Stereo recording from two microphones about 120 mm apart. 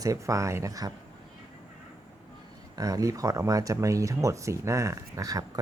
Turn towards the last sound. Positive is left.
turn(degrees=-30)  # may be behind; listen again after turning